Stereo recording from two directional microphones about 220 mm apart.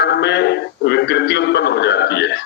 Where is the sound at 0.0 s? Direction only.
50° left (ahead or behind).